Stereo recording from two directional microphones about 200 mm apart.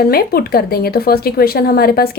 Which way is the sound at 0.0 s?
50° left (ahead or behind).